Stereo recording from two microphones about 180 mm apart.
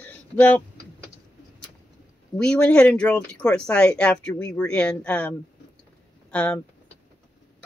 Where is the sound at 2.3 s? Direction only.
5° left (ahead or behind).